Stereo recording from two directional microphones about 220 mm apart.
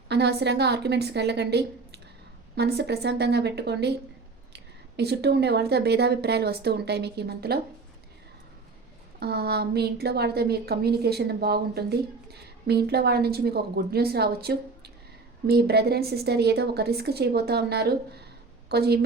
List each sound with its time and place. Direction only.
0.1 s a woman's voice: 50° right (ahead or behind)
9.2 s a woman's voice: 45° right (ahead or behind)